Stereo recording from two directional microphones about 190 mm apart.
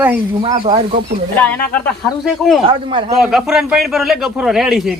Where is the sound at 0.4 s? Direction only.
25° right (ahead or behind).